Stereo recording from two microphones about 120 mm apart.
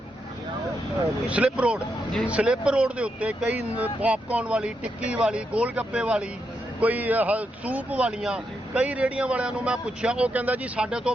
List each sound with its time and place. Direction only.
1.3 s speech: 10° right (ahead or behind)